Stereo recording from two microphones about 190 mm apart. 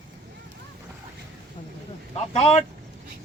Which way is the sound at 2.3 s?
35° left (ahead or behind).